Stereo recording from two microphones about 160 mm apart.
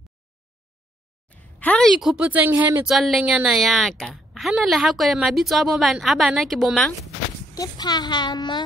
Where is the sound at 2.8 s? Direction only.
Centre (ahead or behind).